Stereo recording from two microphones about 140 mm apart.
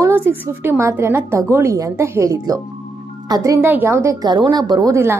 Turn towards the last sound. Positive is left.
turn(degrees=-20)  # may be behind; listen again after turning